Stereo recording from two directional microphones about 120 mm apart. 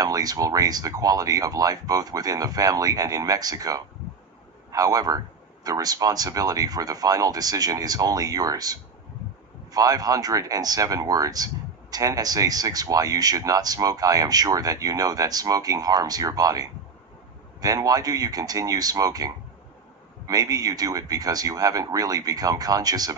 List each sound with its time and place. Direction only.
0.0 s speech: 30° right (ahead or behind)